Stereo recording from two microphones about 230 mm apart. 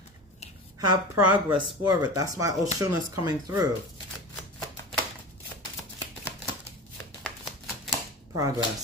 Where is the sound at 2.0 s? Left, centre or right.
Centre.